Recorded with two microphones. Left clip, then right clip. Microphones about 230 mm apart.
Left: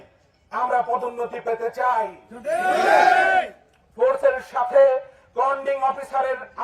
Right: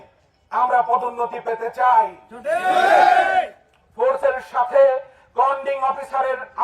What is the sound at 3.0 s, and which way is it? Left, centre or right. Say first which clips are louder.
Speech: right 2 dB; right.